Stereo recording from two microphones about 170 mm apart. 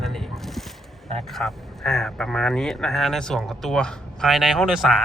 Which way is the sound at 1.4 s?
5° left (ahead or behind).